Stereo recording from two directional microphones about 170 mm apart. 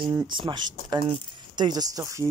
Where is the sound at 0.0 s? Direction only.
25° right (ahead or behind).